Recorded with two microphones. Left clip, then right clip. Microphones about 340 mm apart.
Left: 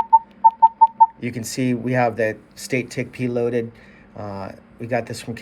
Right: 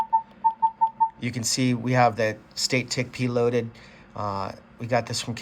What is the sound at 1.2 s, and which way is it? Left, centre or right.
Speech, centre.